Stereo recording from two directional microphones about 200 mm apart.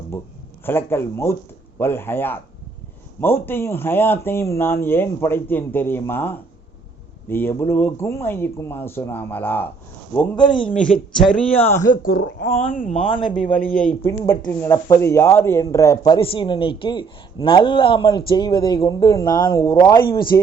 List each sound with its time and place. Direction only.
0.6 s speech: 10° left (ahead or behind)
10.4 s speech: 25° left (ahead or behind)
10.7 s speech: 5° left (ahead or behind)
12.1 s speech: 55° left (ahead or behind)
12.5 s speech: 35° left (ahead or behind)
13.2 s speech: 5° left (ahead or behind)